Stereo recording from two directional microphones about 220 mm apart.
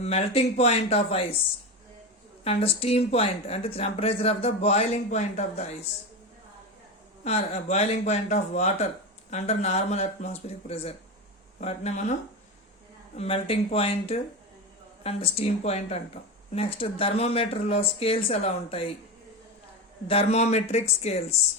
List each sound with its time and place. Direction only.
0.0 s speech: 30° left (ahead or behind)
2.4 s speech: 25° left (ahead or behind)
7.3 s speech: 30° left (ahead or behind)
11.6 s speech: 30° left (ahead or behind)
13.1 s speech: 25° left (ahead or behind)
20.1 s speech: 30° left (ahead or behind)